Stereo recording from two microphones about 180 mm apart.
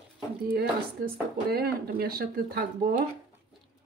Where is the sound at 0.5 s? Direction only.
55° right (ahead or behind).